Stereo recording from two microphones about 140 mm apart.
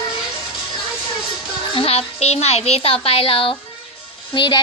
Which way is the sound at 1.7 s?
40° left (ahead or behind).